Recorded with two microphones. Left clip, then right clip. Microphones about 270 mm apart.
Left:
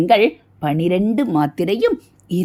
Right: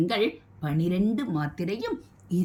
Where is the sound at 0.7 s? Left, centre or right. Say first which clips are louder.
Left 11 dB; left.